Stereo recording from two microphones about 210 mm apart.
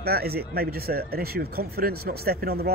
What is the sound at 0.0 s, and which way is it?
Speech, 50° right (ahead or behind).